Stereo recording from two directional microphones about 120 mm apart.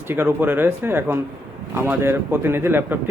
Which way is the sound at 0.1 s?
20° right (ahead or behind).